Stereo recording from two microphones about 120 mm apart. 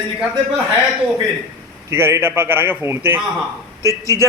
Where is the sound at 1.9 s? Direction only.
20° right (ahead or behind).